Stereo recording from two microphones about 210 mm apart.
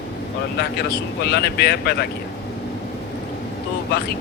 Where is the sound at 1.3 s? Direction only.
50° left (ahead or behind).